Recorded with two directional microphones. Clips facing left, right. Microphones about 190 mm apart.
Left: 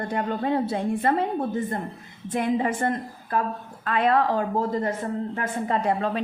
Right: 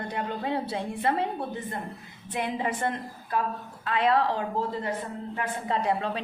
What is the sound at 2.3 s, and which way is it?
A woman's voice, 50° left (ahead or behind).